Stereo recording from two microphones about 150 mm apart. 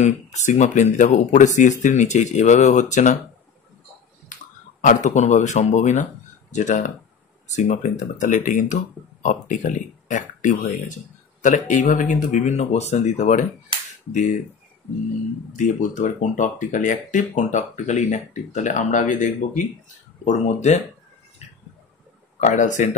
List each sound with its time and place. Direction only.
0.0 s speech: 50° left (ahead or behind)
4.3 s a sound: 55° left (ahead or behind)
4.8 s speech: 55° left (ahead or behind)
15.5 s speech: 55° left (ahead or behind)
22.4 s speech: 55° left (ahead or behind)